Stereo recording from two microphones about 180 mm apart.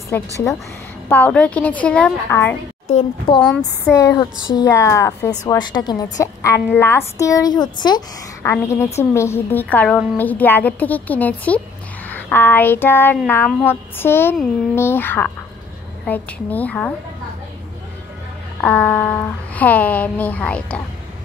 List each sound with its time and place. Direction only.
0.1 s a woman's voice: 10° left (ahead or behind)
4.0 s a woman's voice: 20° left (ahead or behind)
18.6 s a woman's voice: 10° left (ahead or behind)